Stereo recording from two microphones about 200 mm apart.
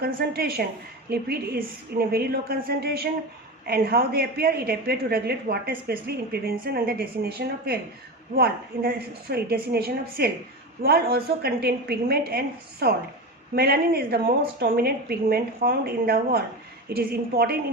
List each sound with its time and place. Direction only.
0.0 s a woman's voice: 50° right (ahead or behind)